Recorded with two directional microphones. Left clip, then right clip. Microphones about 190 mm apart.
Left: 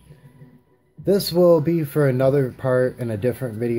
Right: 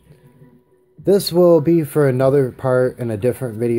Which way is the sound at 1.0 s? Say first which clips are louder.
Right 3 dB; 25° right (ahead or behind).